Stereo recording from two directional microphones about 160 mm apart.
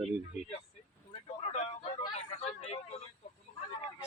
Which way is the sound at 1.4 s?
40° left (ahead or behind).